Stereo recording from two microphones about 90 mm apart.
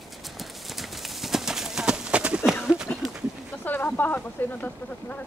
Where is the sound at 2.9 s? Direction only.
15° left (ahead or behind).